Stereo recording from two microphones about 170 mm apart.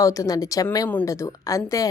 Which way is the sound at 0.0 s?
20° left (ahead or behind).